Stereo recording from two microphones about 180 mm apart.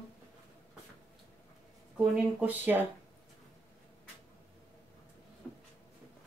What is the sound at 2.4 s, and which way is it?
Speech, 10° right (ahead or behind).